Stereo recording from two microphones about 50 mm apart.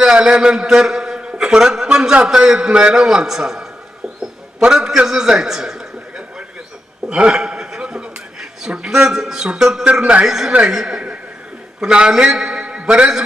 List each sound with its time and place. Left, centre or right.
0.0 s a man's voice: centre
4.2 s a sound: centre
7.1 s a man's voice: centre